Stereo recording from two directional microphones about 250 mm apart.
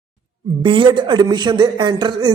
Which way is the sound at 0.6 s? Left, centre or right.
Centre.